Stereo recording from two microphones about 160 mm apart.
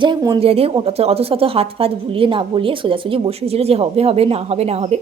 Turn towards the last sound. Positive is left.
turn(degrees=-40)  # may be behind; listen again after turning